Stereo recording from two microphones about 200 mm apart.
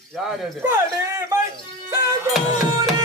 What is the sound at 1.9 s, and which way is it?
Music, 15° right (ahead or behind).